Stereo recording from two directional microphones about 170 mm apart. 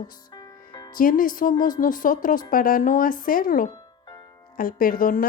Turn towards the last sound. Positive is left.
turn(degrees=55)  # may be behind; listen again after turning